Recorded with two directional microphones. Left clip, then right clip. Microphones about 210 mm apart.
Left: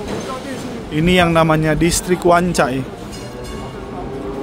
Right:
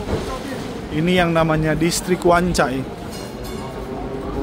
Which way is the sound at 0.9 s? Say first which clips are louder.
Left 4 dB; 15° left (ahead or behind).